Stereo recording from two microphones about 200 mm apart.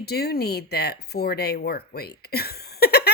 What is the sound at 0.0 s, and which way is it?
Speech, 50° left (ahead or behind).